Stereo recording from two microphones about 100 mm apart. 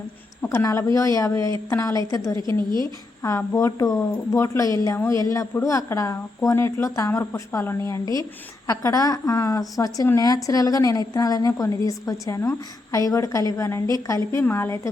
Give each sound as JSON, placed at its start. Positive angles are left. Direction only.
{"t": 0.5, "sound": "a woman's voice", "side_deg": 30}